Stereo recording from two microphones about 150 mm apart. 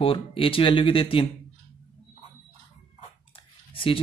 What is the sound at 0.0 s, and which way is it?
Speech, 35° left (ahead or behind).